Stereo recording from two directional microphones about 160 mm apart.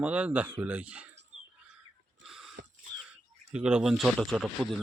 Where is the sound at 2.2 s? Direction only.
Centre (ahead or behind).